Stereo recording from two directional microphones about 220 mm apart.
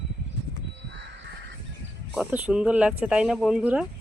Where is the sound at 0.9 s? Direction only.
55° right (ahead or behind).